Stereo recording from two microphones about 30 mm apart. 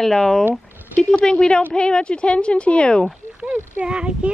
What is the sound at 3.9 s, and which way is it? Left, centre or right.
Speech, right.